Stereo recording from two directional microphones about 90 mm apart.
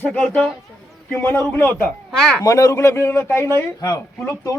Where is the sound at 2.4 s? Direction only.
40° left (ahead or behind).